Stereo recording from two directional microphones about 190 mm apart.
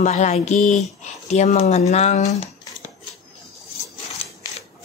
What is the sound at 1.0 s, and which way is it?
Speech, 35° left (ahead or behind).